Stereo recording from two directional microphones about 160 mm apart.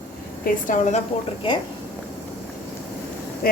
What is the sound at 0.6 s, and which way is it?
Speech, 50° left (ahead or behind).